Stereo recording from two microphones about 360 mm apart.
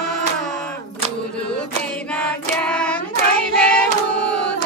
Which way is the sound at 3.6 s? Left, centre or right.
Centre.